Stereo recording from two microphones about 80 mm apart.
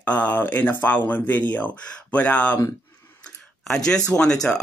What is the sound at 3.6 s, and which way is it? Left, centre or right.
Speech, centre.